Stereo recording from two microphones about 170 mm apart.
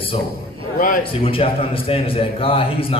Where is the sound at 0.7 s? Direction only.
55° left (ahead or behind).